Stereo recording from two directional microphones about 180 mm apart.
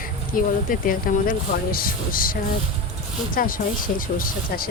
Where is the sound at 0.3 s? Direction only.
50° left (ahead or behind).